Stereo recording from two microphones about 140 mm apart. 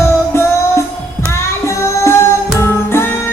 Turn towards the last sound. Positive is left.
turn(degrees=15)  # may be behind; listen again after turning